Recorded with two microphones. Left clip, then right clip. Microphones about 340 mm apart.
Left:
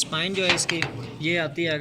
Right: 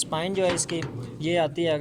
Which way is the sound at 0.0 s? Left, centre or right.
Right.